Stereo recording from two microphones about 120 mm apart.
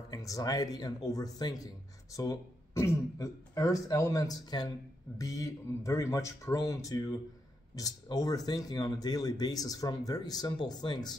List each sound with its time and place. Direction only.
0.1 s speech: 30° left (ahead or behind)